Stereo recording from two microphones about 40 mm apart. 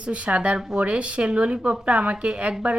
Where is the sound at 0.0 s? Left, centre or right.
Right.